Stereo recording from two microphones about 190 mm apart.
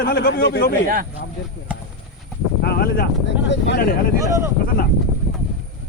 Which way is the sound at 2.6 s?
55° left (ahead or behind).